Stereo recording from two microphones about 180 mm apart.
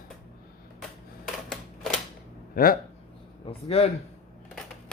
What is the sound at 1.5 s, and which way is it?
Typewriter, 5° left (ahead or behind).